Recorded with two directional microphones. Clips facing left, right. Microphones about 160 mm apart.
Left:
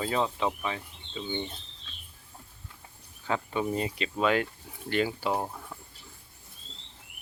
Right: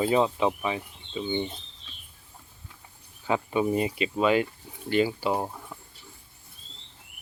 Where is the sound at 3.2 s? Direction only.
15° right (ahead or behind).